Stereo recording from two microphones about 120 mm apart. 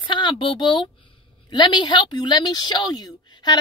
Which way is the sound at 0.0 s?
40° left (ahead or behind).